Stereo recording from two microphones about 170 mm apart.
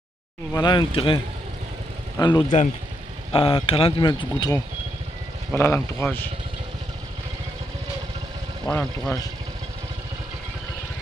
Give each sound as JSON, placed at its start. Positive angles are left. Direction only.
{"t": 0.5, "sound": "speech", "side_deg": 25}
{"t": 8.6, "sound": "speech", "side_deg": 5}